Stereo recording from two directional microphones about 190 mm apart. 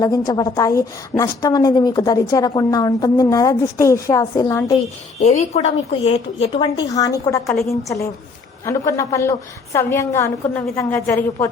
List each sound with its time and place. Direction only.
0.0 s a woman's voice: 20° left (ahead or behind)
5.2 s a woman's voice: 35° left (ahead or behind); by 11.4 s 15° left (ahead or behind)